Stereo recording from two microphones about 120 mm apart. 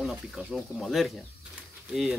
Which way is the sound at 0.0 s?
Centre (ahead or behind).